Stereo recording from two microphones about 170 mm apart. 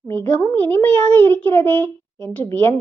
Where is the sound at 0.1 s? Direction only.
10° left (ahead or behind).